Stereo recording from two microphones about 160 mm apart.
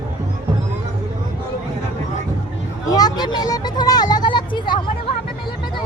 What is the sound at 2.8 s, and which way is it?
Vehicle, 25° left (ahead or behind).